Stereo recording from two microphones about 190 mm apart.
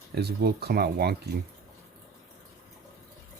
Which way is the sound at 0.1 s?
60° right (ahead or behind).